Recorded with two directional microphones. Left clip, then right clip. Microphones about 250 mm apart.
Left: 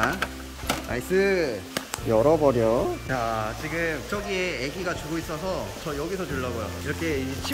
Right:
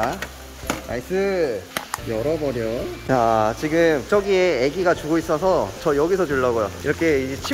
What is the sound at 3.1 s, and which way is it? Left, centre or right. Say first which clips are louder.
Speech: right 9 dB; right.